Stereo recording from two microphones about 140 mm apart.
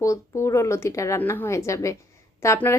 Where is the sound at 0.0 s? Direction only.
20° left (ahead or behind).